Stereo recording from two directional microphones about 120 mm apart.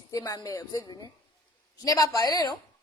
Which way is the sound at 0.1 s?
30° left (ahead or behind).